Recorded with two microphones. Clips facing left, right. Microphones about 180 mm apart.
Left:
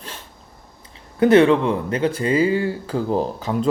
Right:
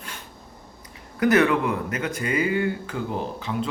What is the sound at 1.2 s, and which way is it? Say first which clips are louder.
Speech: left 6 dB; 25° left (ahead or behind).